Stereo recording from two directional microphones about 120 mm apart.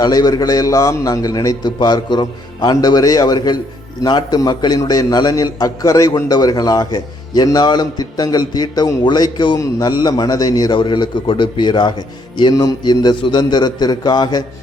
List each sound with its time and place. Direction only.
0.0 s a man's voice: 35° left (ahead or behind)